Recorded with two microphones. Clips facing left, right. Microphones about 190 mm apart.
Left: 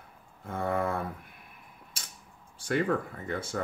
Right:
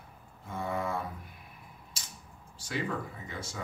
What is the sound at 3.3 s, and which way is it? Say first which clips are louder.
Speech: left 8 dB; 55° left (ahead or behind).